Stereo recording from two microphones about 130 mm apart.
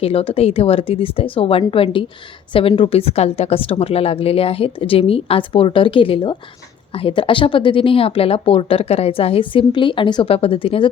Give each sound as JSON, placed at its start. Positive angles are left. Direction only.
{"t": 0.0, "sound": "a woman's voice", "side_deg": 50}